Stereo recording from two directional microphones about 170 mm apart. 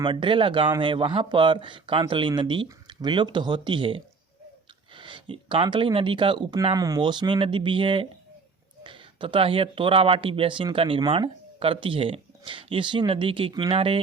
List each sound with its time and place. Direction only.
0.0 s speech: 30° right (ahead or behind)
6.7 s speech: 20° right (ahead or behind)